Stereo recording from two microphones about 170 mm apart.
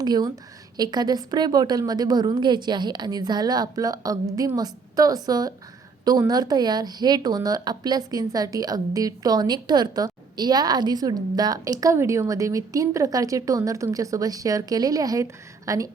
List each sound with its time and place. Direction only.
0.0 s a woman's voice: 25° right (ahead or behind)